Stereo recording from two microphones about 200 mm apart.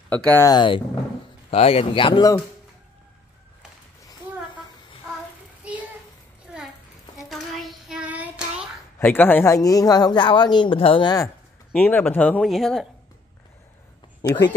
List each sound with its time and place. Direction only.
0.1 s speech: 10° left (ahead or behind)
5.6 s child singing: 5° right (ahead or behind)
6.5 s a sound: centre (ahead or behind)
7.2 s child singing: centre (ahead or behind)
9.0 s speech: 10° left (ahead or behind)
11.7 s speech: 10° left (ahead or behind)